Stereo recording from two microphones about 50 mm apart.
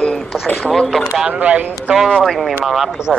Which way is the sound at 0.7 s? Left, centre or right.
Centre.